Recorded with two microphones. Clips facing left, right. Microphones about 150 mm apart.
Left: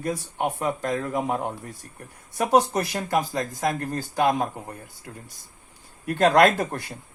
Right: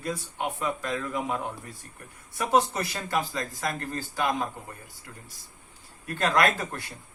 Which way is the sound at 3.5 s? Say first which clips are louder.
Left 6 dB; 40° left (ahead or behind).